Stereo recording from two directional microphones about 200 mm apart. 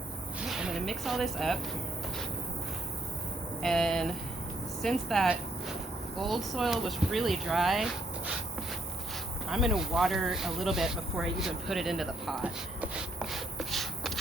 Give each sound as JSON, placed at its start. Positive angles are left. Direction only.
{"t": 0.3, "sound": "a sound", "side_deg": 0}
{"t": 3.6, "sound": "speech", "side_deg": 0}
{"t": 9.5, "sound": "speech", "side_deg": 0}